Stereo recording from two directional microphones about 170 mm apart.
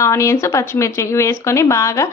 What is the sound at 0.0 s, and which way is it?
A woman's voice, 15° left (ahead or behind).